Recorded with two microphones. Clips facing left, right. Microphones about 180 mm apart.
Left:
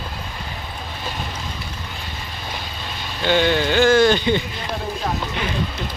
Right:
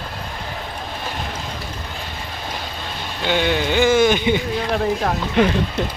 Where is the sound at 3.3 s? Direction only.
10° right (ahead or behind).